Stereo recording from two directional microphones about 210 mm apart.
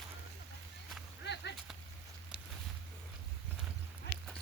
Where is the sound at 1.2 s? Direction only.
55° left (ahead or behind).